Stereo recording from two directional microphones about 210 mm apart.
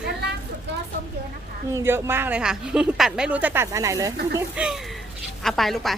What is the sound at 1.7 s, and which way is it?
Speech, 10° right (ahead or behind).